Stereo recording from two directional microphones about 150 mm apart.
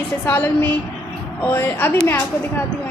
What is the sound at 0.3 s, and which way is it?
A woman's voice, 15° left (ahead or behind).